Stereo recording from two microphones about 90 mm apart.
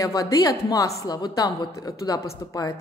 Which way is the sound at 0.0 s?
40° left (ahead or behind).